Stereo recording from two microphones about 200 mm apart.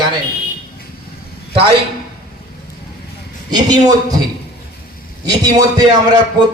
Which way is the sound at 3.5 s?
20° right (ahead or behind).